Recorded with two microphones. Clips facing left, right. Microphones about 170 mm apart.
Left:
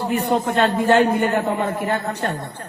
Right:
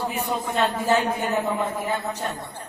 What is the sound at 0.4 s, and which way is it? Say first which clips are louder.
A woman's voice: left 5 dB; 65° left (ahead or behind).